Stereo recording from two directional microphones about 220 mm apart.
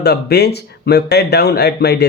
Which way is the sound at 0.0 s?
50° left (ahead or behind).